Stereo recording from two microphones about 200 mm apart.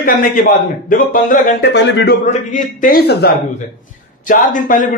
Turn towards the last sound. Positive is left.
turn(degrees=40)  # may be behind; listen again after turning